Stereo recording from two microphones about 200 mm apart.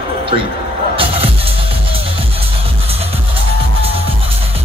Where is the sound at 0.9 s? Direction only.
25° right (ahead or behind).